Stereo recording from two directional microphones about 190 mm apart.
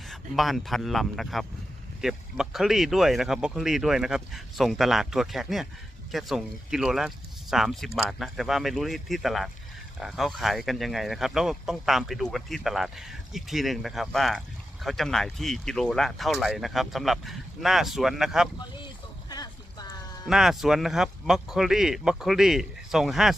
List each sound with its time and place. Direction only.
0.1 s speech: centre (ahead or behind)
19.3 s a sound: 20° left (ahead or behind)
20.2 s speech: centre (ahead or behind)